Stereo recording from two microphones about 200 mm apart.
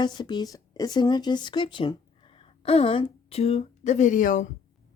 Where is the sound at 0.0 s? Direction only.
20° left (ahead or behind).